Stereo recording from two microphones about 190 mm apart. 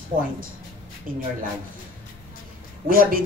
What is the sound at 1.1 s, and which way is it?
Speech, 45° right (ahead or behind).